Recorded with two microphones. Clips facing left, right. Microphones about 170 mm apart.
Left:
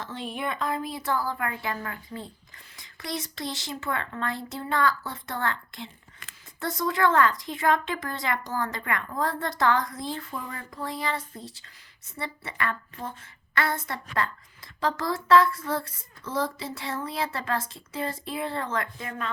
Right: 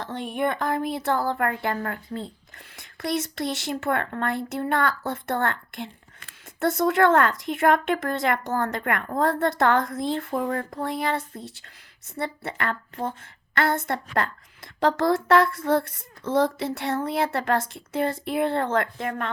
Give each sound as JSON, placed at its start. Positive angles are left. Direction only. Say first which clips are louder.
{"t": 0.1, "sound": "speech", "louder": "right 7 dB", "side_deg": -55}